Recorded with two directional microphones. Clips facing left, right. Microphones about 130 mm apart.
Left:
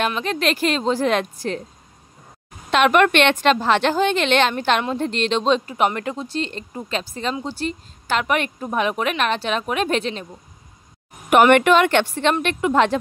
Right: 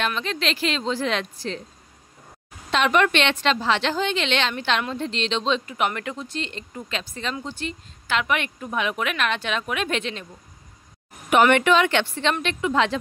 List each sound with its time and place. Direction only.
0.2 s a woman's voice: 50° left (ahead or behind)
2.7 s a woman's voice: 60° left (ahead or behind); by 10.2 s 40° left (ahead or behind)
11.5 s a woman's voice: 55° left (ahead or behind)